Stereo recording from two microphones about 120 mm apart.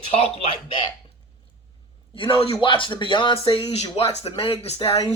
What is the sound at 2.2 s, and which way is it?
Speech, 50° left (ahead or behind).